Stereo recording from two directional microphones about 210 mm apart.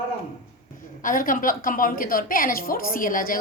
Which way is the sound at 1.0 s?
40° left (ahead or behind).